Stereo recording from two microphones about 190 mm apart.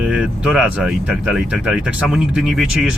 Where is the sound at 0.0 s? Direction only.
5° right (ahead or behind).